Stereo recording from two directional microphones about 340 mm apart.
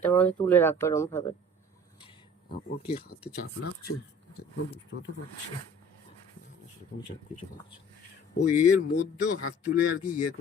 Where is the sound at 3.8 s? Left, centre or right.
Left.